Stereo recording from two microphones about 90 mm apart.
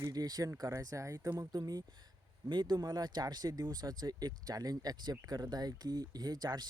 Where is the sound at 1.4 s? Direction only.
45° right (ahead or behind).